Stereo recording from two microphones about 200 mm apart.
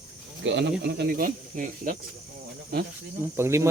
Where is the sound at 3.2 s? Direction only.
15° right (ahead or behind).